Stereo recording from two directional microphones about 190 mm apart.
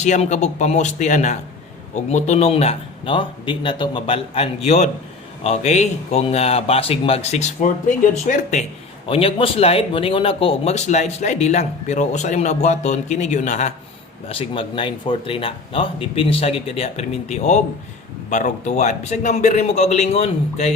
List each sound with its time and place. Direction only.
0.0 s speech: 35° left (ahead or behind)
9.0 s speech: 30° left (ahead or behind)
14.3 s speech: 30° left (ahead or behind)